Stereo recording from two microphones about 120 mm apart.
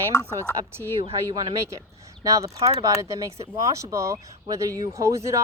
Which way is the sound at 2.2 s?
25° right (ahead or behind).